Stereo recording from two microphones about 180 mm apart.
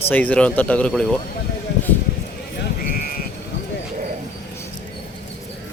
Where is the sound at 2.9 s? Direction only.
50° left (ahead or behind).